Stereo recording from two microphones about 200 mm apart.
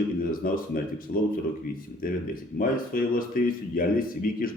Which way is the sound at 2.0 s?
45° left (ahead or behind).